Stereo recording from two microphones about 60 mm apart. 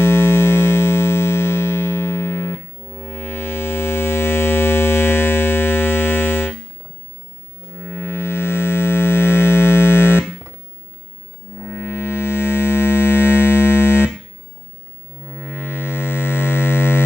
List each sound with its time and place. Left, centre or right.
0.0 s music: left
7.8 s music: left
11.7 s music: left
15.4 s music: left